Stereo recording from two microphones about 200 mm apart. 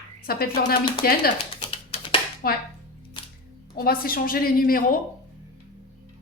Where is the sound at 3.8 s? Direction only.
50° left (ahead or behind).